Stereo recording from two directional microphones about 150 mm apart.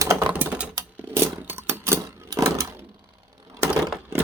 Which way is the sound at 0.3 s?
10° right (ahead or behind).